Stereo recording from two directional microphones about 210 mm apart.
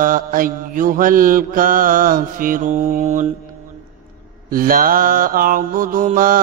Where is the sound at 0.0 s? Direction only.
40° right (ahead or behind).